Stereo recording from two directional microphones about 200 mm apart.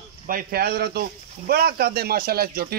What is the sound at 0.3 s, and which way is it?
Speech, 45° right (ahead or behind).